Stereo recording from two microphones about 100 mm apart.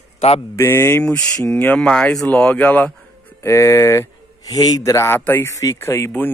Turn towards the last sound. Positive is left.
turn(degrees=25)  # may be behind; listen again after turning